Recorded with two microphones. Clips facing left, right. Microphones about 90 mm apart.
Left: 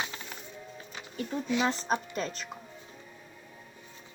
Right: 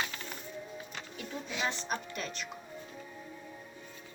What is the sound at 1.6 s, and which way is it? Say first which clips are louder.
Speech: left 5 dB; 35° left (ahead or behind).